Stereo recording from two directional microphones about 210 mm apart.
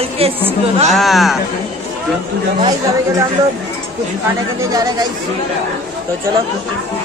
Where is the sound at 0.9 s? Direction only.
Centre (ahead or behind).